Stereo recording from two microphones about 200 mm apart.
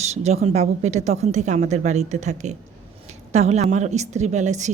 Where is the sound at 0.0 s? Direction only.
35° right (ahead or behind).